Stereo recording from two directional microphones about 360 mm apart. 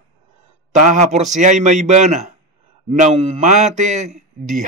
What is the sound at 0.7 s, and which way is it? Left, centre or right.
A man's voice, centre.